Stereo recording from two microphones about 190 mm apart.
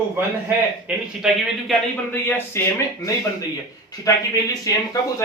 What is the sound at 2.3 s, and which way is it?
Speech, 10° left (ahead or behind).